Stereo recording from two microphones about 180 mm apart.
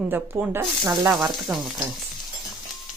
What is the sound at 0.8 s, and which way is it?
Sizzle, 20° right (ahead or behind).